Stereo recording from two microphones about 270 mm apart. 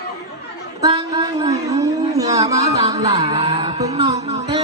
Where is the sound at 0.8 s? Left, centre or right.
Centre.